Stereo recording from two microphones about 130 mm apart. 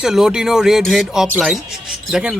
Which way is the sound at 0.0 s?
5° right (ahead or behind).